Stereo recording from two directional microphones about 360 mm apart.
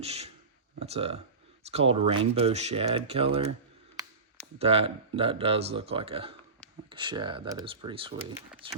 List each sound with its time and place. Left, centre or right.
0.0 s speech: centre
4.5 s speech: centre